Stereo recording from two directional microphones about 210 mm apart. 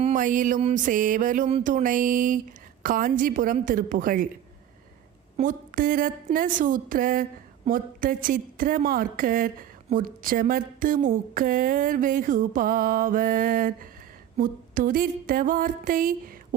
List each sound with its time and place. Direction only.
0.0 s a woman's voice: 40° right (ahead or behind)
5.4 s a woman's voice: 40° right (ahead or behind)